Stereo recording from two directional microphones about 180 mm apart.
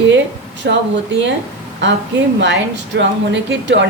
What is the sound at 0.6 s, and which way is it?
Speech, 75° right (ahead or behind).